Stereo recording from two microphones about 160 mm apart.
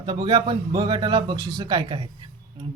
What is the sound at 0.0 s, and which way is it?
Speech, 30° right (ahead or behind).